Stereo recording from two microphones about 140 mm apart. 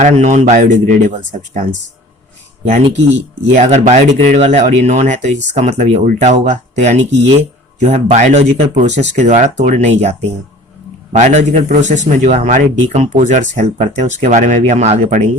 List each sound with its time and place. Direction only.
0.0 s speech: 60° right (ahead or behind)
3.5 s speech: 60° right (ahead or behind)